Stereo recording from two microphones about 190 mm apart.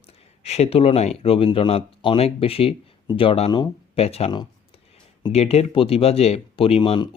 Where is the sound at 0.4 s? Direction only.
35° left (ahead or behind).